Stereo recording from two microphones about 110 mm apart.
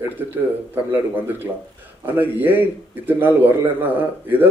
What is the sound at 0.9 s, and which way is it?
A man's voice, 15° right (ahead or behind).